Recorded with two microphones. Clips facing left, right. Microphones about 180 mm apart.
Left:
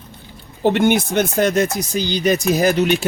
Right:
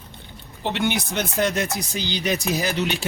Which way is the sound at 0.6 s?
50° left (ahead or behind).